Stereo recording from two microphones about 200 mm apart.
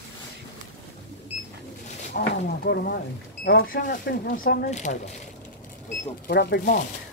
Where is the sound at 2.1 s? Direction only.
50° left (ahead or behind).